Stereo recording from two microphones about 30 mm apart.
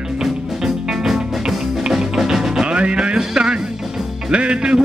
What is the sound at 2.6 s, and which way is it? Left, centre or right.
Music, right.